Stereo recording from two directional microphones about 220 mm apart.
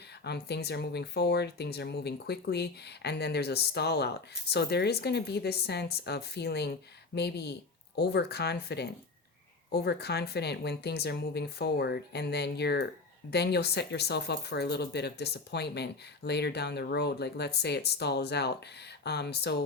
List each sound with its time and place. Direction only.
0.3 s speech: 50° left (ahead or behind)